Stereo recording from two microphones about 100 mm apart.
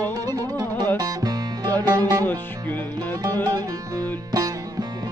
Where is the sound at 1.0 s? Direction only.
40° right (ahead or behind).